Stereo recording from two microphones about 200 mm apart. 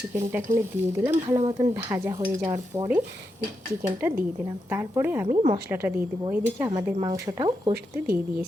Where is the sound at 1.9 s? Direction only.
10° right (ahead or behind).